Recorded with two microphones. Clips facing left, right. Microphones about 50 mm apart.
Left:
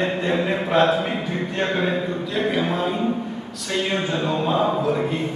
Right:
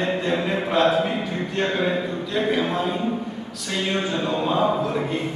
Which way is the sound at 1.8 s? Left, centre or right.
Centre.